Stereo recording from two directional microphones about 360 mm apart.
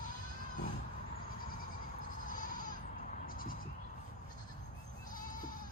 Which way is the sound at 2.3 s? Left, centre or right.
Left.